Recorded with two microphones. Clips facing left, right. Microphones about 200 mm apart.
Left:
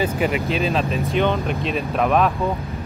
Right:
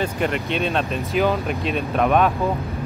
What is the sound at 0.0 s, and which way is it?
Speech, 5° left (ahead or behind).